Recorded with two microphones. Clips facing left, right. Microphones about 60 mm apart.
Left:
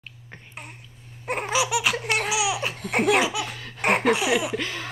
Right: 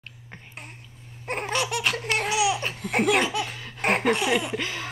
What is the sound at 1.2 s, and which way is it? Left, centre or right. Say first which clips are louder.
Laughter: left 3 dB; centre.